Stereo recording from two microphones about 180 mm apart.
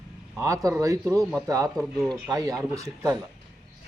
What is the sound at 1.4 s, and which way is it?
Speech, 20° right (ahead or behind).